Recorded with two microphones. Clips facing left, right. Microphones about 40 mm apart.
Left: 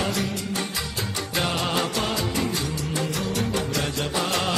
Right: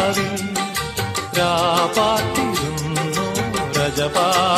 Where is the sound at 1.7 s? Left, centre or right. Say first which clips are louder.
Right 8 dB; right.